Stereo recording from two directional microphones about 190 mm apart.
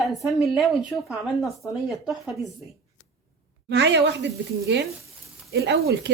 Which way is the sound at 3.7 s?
65° right (ahead or behind).